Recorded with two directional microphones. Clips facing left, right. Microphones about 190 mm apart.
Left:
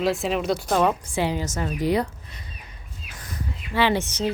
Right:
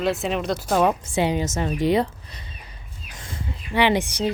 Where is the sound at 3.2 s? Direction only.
25° right (ahead or behind).